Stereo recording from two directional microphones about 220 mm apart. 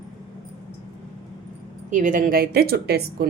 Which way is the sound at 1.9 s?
35° right (ahead or behind).